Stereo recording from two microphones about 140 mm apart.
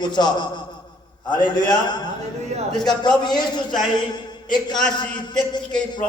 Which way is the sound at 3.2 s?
30° left (ahead or behind).